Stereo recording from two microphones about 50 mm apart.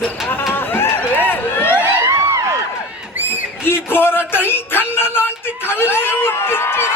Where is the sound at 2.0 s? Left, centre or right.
Right.